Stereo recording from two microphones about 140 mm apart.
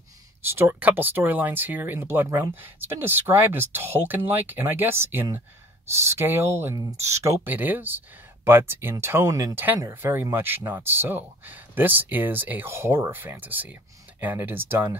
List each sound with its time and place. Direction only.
0.5 s speech: 15° right (ahead or behind)